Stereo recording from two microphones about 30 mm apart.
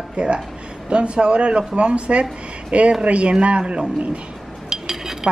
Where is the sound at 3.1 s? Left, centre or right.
Right.